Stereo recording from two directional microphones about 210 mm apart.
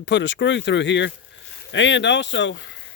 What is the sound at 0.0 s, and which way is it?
Speech, 60° left (ahead or behind).